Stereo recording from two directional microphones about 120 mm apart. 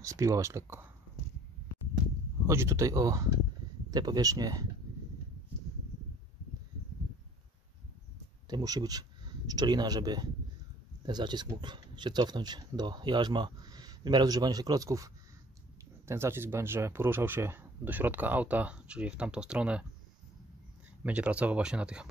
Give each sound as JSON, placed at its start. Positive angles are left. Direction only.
{"t": 0.0, "sound": "speech", "side_deg": -25}
{"t": 2.4, "sound": "speech", "side_deg": -25}
{"t": 8.5, "sound": "speech", "side_deg": -35}
{"t": 16.1, "sound": "speech", "side_deg": -20}
{"t": 21.0, "sound": "speech", "side_deg": -10}